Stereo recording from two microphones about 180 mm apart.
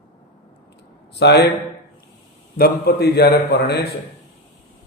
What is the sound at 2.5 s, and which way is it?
A man's voice, 60° left (ahead or behind).